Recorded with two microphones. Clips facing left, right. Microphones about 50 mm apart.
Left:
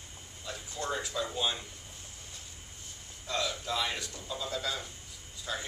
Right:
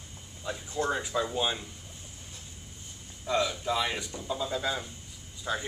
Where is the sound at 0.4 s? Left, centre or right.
Right.